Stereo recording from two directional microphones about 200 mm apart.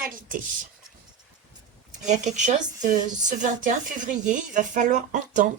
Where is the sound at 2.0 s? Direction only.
35° right (ahead or behind).